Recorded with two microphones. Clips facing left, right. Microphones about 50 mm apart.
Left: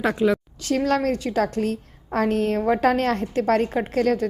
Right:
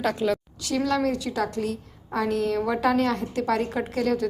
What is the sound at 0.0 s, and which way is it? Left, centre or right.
Speech, left.